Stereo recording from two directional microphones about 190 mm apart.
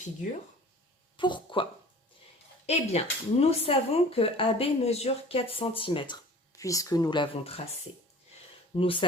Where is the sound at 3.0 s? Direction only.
35° left (ahead or behind).